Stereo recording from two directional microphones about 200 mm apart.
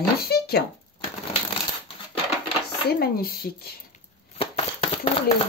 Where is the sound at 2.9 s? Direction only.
50° left (ahead or behind).